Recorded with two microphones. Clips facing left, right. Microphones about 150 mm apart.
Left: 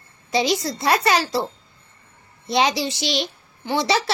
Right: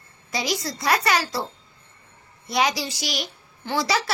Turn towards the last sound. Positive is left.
turn(degrees=25)  # may be behind; listen again after turning